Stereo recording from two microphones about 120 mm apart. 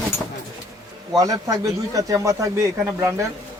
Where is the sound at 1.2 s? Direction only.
30° right (ahead or behind).